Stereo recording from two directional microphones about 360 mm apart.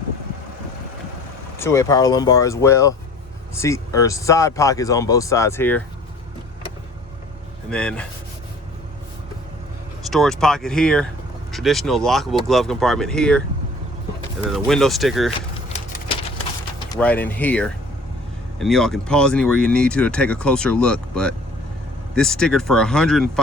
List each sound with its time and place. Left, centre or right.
1.5 s speech: centre
7.7 s speech: centre
10.1 s speech: centre
14.5 s speech: centre
15.4 s a sound: centre
16.9 s speech: centre